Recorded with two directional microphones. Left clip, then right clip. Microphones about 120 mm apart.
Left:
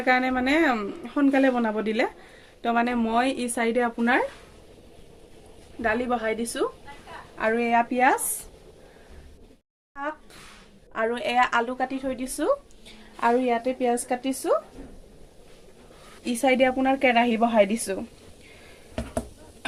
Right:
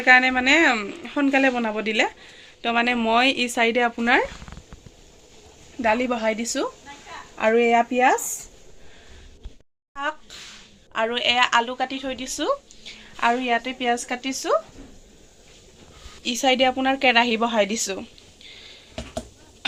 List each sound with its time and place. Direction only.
0.0 s speech: 5° left (ahead or behind)
2.8 s speech: 10° right (ahead or behind); by 4.2 s 40° right (ahead or behind)
5.8 s a woman's voice: 75° right (ahead or behind)
7.3 s speech: 60° right (ahead or behind)
9.9 s a woman's voice: 5° left (ahead or behind)
16.2 s a woman's voice: 15° left (ahead or behind)